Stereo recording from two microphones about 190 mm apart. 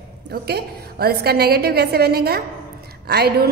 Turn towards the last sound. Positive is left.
turn(degrees=-60)  # may be behind; listen again after turning